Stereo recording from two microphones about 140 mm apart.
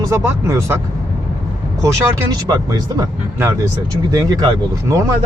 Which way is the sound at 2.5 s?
25° right (ahead or behind).